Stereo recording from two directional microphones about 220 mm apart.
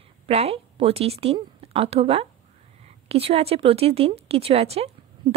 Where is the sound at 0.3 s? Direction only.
25° right (ahead or behind).